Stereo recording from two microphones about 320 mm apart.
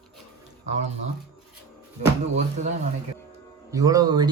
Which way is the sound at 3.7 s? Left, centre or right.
Centre.